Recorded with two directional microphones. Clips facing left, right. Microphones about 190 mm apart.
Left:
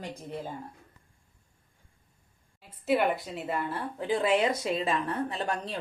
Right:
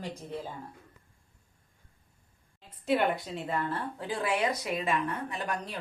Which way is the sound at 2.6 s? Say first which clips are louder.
Left 1 dB; 5° left (ahead or behind).